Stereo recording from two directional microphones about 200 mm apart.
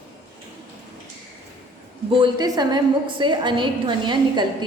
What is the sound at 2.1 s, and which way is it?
A woman's voice, 20° right (ahead or behind).